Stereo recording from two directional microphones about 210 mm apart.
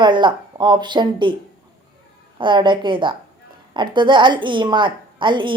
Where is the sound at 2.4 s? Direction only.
20° right (ahead or behind).